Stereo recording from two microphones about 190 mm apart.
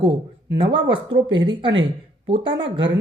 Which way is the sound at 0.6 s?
25° right (ahead or behind).